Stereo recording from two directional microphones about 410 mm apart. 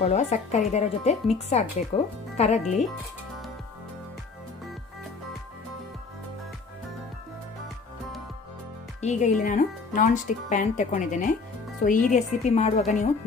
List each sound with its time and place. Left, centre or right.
0.0 s speech: centre
9.0 s speech: centre